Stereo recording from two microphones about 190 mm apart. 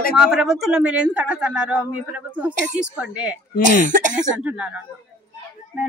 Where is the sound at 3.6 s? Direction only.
45° right (ahead or behind).